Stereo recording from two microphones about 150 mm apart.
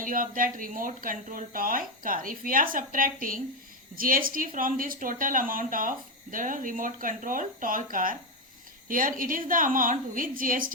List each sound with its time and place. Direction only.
0.0 s speech: 65° right (ahead or behind)